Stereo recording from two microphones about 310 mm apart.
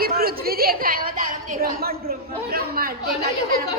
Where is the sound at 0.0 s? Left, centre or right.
Right.